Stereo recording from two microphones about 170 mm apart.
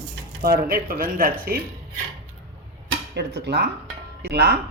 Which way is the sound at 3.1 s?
75° right (ahead or behind).